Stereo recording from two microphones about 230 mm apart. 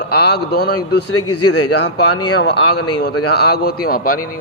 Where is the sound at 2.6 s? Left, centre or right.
Left.